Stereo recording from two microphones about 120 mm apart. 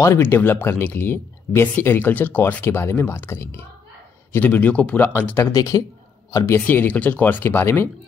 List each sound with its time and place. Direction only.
0.0 s speech: 20° left (ahead or behind)
5.5 s speech: 30° left (ahead or behind)